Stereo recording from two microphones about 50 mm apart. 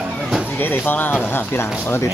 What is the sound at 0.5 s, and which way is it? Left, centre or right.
Speech, left.